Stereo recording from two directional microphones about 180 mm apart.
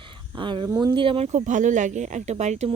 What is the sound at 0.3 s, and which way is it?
Speech, 25° right (ahead or behind).